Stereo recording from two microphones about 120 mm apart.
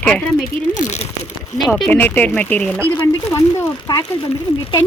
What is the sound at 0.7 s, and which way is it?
Speech, 80° left.